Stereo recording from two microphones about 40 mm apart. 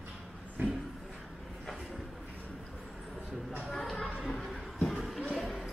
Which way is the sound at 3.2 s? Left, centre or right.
Centre.